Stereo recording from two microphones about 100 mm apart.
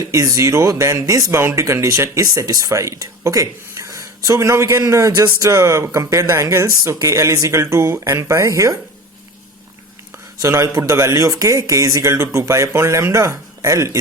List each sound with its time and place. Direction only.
0.1 s speech: 30° right (ahead or behind)
10.4 s speech: 30° right (ahead or behind)